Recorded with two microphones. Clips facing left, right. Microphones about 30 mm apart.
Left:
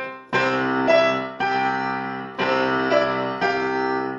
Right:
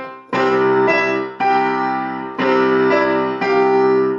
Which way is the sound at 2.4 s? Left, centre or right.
Centre.